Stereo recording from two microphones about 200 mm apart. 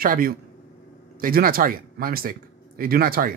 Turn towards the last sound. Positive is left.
turn(degrees=-45)  # may be behind; listen again after turning